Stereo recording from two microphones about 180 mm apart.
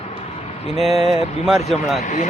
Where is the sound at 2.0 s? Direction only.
45° left (ahead or behind).